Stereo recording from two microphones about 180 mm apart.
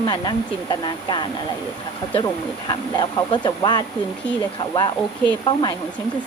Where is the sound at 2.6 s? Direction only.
25° left (ahead or behind).